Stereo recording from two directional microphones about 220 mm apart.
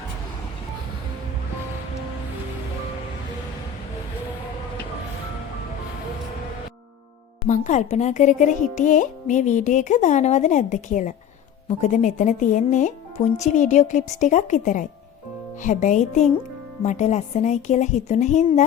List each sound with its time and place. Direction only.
7.4 s speech: 35° left (ahead or behind)